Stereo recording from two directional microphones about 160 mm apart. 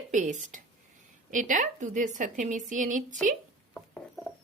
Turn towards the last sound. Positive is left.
turn(degrees=10)  # may be behind; listen again after turning